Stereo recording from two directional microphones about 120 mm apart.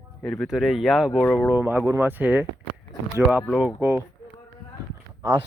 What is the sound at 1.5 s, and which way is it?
Speech, 15° right (ahead or behind).